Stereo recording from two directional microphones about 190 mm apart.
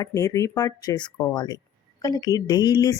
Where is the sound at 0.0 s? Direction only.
20° left (ahead or behind).